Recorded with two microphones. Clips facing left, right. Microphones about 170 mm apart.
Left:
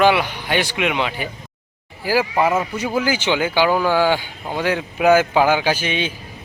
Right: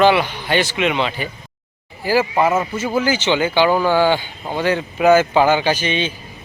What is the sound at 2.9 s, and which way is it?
A man's voice, 10° left (ahead or behind).